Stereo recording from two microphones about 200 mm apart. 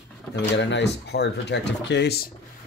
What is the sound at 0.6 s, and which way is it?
Speech, 60° left (ahead or behind).